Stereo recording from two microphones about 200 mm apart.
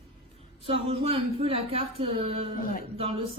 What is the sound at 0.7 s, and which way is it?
Speech, 30° right (ahead or behind).